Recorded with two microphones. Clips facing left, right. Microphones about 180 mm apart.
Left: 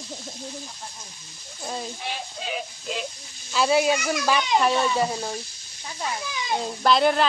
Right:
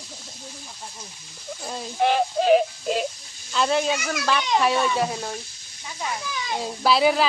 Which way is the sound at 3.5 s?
5° left (ahead or behind).